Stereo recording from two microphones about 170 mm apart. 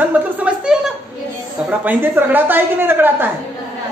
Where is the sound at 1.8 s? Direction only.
10° right (ahead or behind).